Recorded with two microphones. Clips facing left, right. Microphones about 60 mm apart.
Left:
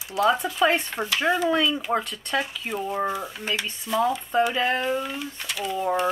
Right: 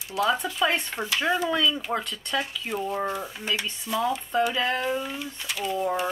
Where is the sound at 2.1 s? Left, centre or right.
Left.